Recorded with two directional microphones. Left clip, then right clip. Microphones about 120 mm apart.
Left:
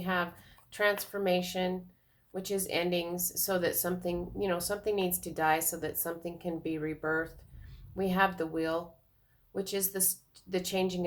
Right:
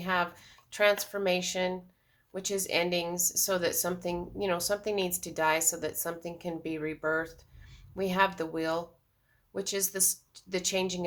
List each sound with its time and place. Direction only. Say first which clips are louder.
0.0 s speech: right 3 dB; 30° right (ahead or behind)